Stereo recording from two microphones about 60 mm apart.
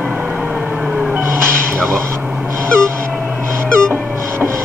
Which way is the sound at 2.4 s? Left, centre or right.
Right.